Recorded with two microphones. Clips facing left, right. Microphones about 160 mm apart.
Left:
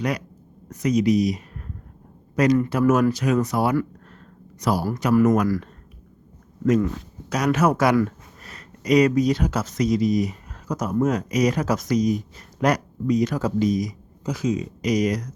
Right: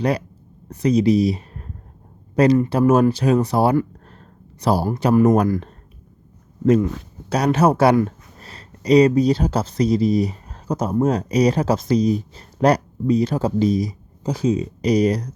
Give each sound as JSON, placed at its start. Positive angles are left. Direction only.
{"t": 0.7, "sound": "speech", "side_deg": -30}
{"t": 7.3, "sound": "speech", "side_deg": -30}